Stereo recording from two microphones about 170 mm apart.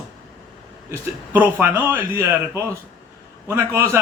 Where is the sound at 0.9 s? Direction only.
10° right (ahead or behind).